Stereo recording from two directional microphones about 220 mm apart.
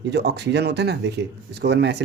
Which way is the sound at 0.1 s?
50° right (ahead or behind).